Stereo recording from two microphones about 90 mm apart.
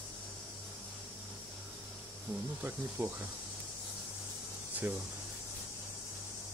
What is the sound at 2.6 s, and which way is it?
Speech, 20° right (ahead or behind).